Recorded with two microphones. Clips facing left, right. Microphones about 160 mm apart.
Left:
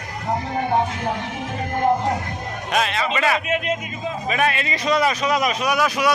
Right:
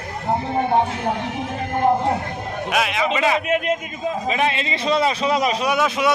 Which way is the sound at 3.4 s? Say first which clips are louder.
Right 3 dB; 50° right (ahead or behind).